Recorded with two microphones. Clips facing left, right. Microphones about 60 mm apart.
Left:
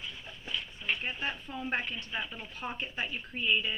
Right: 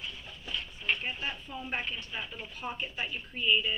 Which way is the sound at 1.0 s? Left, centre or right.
Left.